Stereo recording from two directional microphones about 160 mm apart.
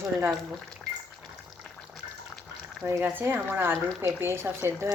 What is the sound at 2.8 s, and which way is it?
Speech, 15° right (ahead or behind).